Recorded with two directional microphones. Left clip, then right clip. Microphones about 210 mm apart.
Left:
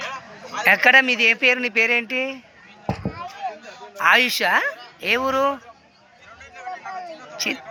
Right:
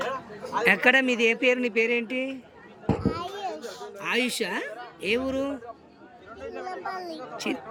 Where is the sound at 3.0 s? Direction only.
30° right (ahead or behind).